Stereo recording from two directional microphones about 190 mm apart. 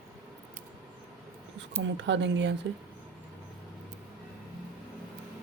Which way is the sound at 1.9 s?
70° right (ahead or behind).